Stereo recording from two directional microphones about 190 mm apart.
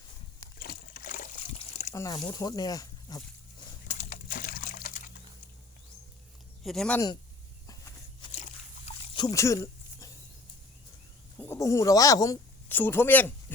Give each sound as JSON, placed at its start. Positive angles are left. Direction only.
{"t": 0.6, "sound": "trickle", "side_deg": 50}
{"t": 1.5, "sound": "a sound", "side_deg": 35}
{"t": 1.9, "sound": "speech", "side_deg": 20}
{"t": 3.8, "sound": "a sound", "side_deg": 40}
{"t": 6.6, "sound": "speech", "side_deg": 0}
{"t": 7.7, "sound": "walk", "side_deg": 20}
{"t": 8.3, "sound": "biting", "side_deg": 35}
{"t": 9.0, "sound": "a sound", "side_deg": 20}
{"t": 11.3, "sound": "speech", "side_deg": 15}